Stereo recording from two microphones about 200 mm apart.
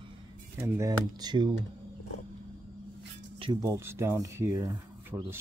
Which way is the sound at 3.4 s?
20° right (ahead or behind).